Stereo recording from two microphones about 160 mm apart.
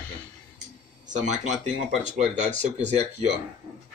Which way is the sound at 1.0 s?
50° right (ahead or behind).